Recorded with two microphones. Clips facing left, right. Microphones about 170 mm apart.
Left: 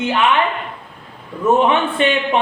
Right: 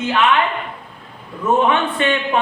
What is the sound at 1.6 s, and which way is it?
Speech, 25° left (ahead or behind).